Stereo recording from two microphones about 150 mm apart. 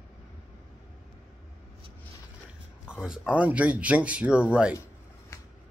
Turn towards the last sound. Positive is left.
turn(degrees=-5)  # may be behind; listen again after turning